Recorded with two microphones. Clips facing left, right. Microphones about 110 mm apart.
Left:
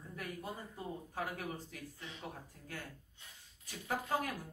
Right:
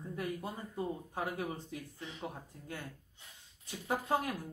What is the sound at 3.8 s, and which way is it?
Speech, 20° right (ahead or behind).